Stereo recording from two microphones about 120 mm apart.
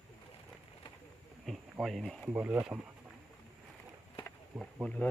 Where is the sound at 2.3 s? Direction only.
15° right (ahead or behind).